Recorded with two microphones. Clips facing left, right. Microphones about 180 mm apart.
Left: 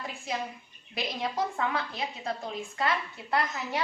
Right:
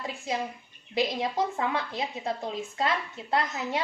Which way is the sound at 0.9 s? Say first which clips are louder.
Right 4 dB; 25° right (ahead or behind).